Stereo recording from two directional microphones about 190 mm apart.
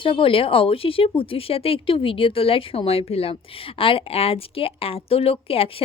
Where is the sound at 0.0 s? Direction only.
25° left (ahead or behind).